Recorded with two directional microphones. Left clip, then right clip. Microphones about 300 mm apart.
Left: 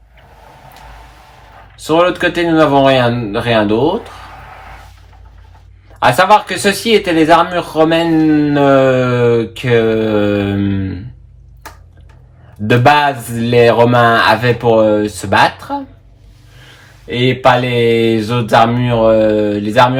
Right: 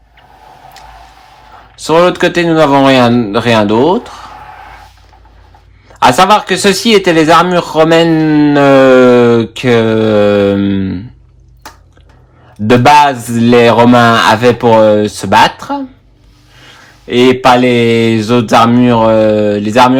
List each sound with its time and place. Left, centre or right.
1.8 s a man's voice: right
5.9 s speech: right
12.6 s speech: right
17.7 s speech: right